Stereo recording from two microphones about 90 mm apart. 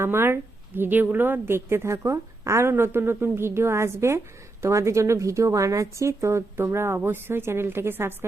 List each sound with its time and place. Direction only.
0.0 s a woman's voice: 25° right (ahead or behind)